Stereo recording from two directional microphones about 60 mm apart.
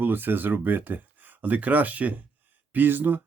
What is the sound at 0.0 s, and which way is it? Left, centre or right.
Speech, right.